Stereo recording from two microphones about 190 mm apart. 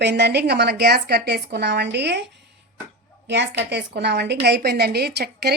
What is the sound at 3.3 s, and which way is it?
A woman's voice, 65° right (ahead or behind).